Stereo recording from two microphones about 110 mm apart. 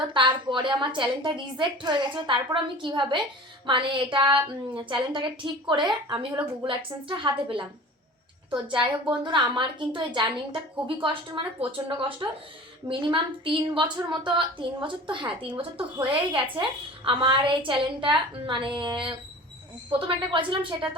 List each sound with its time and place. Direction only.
0.1 s a woman's voice: 50° right (ahead or behind)